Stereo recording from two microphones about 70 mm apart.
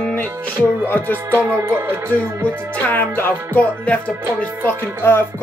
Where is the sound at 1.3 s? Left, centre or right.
Right.